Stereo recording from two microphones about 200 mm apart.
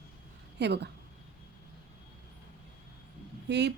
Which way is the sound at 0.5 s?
55° right (ahead or behind).